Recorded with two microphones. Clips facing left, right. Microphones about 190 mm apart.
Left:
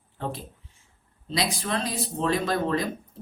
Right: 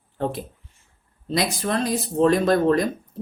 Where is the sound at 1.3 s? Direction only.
45° right (ahead or behind).